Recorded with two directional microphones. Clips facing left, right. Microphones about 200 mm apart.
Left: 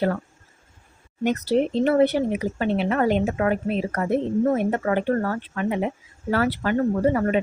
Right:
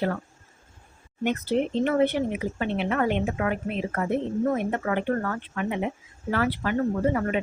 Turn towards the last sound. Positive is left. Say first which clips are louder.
# left 4 dB
turn(degrees=40)  # may be behind; listen again after turning